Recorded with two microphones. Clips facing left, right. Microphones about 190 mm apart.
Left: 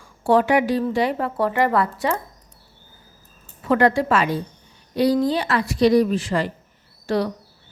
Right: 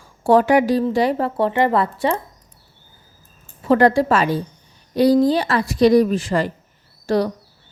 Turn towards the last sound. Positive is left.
turn(degrees=-45)  # may be behind; listen again after turning